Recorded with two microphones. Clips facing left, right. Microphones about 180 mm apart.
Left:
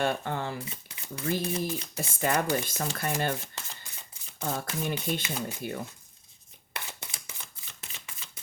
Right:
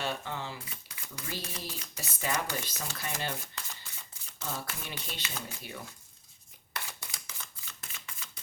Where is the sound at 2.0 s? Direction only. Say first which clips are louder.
Left 6 dB; 50° left (ahead or behind).